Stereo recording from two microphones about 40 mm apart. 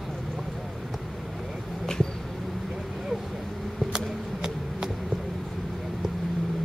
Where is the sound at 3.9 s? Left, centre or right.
Centre.